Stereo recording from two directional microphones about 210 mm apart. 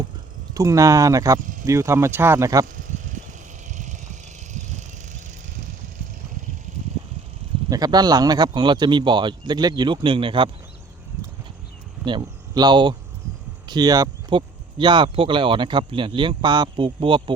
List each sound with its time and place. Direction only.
0.5 s speech: 15° right (ahead or behind)
1.4 s speech: 40° right (ahead or behind)
1.6 s speech: 15° right (ahead or behind)
2.7 s a sound: 35° right (ahead or behind)
3.8 s vehicle: 35° right (ahead or behind)
7.7 s speech: 20° right (ahead or behind)
12.0 s speech: 20° right (ahead or behind)